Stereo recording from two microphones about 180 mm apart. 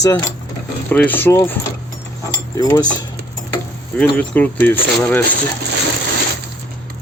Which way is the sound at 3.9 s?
5° left (ahead or behind).